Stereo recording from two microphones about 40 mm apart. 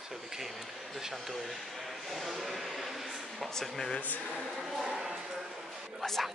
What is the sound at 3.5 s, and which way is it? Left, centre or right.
Speech, centre.